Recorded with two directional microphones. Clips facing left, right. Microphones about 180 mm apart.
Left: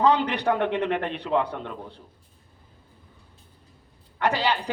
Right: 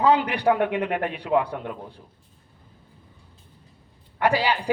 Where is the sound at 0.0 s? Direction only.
10° right (ahead or behind).